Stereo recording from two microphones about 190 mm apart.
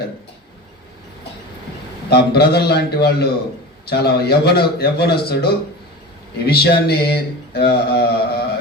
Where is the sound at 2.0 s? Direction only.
60° left (ahead or behind).